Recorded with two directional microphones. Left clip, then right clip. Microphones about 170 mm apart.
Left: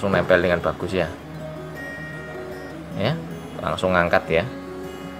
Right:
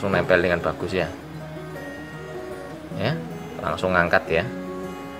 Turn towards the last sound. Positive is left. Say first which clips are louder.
# left 1 dB
turn(degrees=-5)  # may be behind; listen again after turning